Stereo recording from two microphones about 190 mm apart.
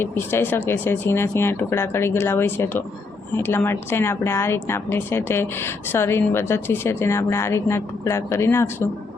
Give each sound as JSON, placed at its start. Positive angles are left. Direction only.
{"t": 0.0, "sound": "a woman's voice", "side_deg": 10}